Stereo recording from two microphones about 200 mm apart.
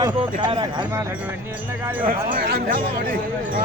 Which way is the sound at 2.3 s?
45° right (ahead or behind).